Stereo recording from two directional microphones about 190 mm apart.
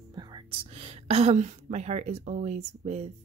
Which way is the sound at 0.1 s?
25° right (ahead or behind).